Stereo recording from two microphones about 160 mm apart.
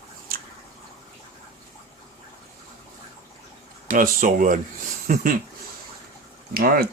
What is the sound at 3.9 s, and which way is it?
Speech, 55° right (ahead or behind).